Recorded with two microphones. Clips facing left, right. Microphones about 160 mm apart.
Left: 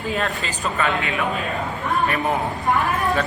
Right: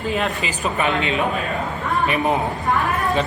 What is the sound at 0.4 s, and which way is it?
A man's voice, 20° right (ahead or behind).